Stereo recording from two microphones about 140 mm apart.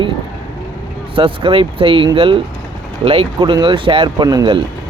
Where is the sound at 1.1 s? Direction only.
40° right (ahead or behind).